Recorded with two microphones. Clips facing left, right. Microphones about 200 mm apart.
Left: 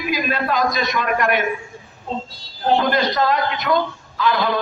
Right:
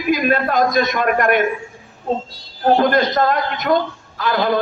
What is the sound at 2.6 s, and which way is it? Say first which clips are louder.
A man's voice: right 3 dB; 50° right (ahead or behind).